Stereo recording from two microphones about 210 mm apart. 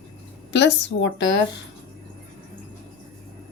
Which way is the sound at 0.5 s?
60° left (ahead or behind).